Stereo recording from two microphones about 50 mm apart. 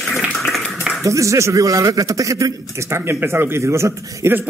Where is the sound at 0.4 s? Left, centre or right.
Centre.